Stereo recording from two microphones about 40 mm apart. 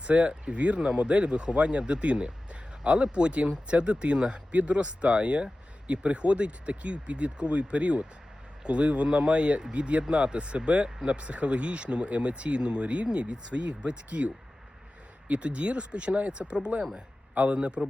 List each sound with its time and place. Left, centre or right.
0.0 s speech: right